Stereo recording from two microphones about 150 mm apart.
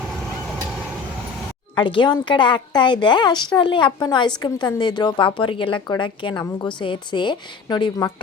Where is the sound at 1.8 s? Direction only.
30° left (ahead or behind).